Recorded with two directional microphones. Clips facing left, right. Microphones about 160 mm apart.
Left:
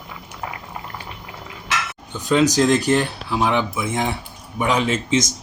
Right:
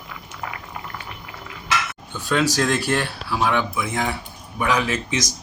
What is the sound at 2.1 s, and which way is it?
Speech, 20° left (ahead or behind).